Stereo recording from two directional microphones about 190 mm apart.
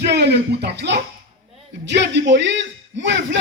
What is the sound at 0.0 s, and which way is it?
Speech, 60° right (ahead or behind).